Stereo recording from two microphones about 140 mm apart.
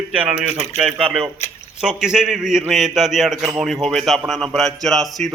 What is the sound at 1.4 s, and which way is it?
Speech, 50° left (ahead or behind).